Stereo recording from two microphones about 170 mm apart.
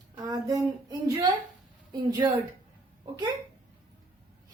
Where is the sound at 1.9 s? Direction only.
20° right (ahead or behind).